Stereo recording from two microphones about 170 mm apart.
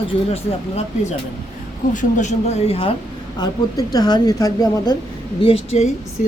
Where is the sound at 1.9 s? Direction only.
50° left (ahead or behind).